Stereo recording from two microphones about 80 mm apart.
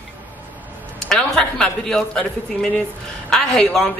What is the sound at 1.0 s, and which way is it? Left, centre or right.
A man's voice, centre.